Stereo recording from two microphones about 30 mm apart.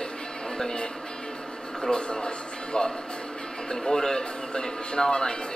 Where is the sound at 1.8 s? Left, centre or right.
Left.